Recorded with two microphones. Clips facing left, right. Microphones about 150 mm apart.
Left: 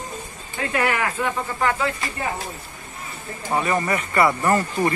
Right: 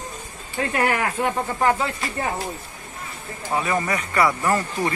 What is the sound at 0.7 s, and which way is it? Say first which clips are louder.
Speech: even; 40° right (ahead or behind).